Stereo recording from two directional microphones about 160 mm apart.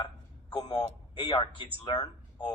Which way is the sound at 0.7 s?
30° left (ahead or behind).